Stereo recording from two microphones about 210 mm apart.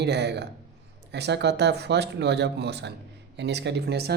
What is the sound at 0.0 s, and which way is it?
Speech, 55° right (ahead or behind).